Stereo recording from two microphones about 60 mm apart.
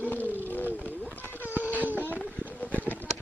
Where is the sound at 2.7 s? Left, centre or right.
Right.